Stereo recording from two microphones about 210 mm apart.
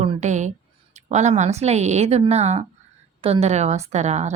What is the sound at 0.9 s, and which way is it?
A woman's voice, 35° right (ahead or behind).